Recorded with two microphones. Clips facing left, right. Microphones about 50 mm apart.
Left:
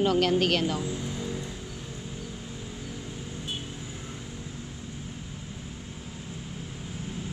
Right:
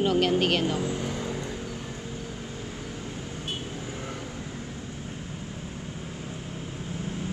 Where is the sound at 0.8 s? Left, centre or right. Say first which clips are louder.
Right 3 dB; right.